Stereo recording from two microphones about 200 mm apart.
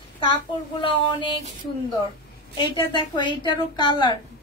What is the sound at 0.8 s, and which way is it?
Speech, 25° left (ahead or behind).